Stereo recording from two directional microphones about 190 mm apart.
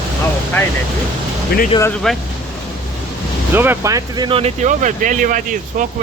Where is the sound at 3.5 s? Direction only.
10° right (ahead or behind).